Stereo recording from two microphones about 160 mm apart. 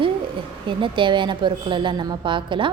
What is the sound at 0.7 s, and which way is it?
A woman's voice, 30° right (ahead or behind).